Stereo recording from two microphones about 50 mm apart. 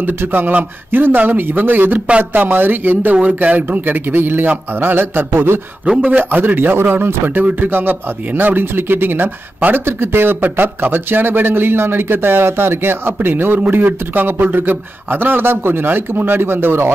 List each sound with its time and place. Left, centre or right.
0.0 s a man's voice: right
5.9 s a man's voice: right
6.4 s a man's voice: right
9.9 s a man's voice: right